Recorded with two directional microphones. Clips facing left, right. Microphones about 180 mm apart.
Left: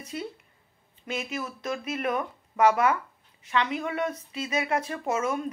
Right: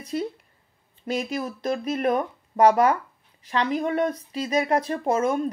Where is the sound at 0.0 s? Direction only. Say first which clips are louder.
Right 7 dB; 35° right (ahead or behind).